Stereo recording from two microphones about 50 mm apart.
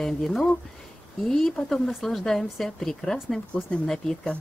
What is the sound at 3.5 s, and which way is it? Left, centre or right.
Speech, left.